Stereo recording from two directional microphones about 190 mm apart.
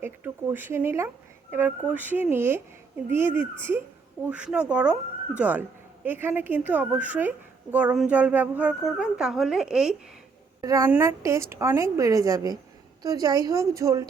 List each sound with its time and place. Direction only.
0.0 s a woman's voice: 10° right (ahead or behind)
10.6 s a woman's voice: 20° right (ahead or behind)